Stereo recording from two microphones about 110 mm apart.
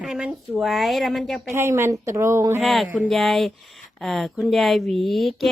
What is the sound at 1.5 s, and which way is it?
Speech, 25° right (ahead or behind).